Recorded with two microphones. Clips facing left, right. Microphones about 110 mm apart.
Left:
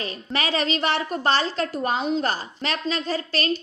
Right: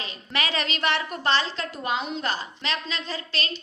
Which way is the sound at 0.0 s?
40° left (ahead or behind).